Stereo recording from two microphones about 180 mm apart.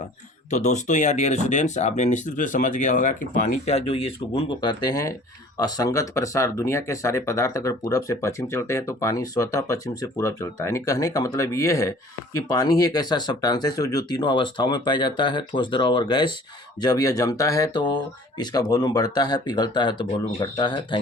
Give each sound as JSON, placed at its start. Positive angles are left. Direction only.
{"t": 0.5, "sound": "speech", "side_deg": 40}